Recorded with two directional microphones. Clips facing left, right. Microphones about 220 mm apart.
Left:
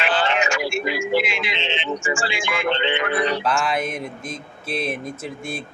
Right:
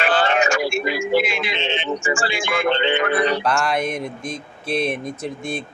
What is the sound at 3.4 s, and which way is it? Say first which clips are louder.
Speech: right 2 dB; centre (ahead or behind).